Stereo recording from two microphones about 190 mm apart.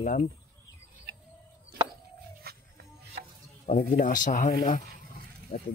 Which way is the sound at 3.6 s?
45° left (ahead or behind).